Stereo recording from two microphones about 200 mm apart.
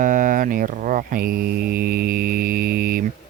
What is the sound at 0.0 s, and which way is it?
Mantra, 40° right (ahead or behind).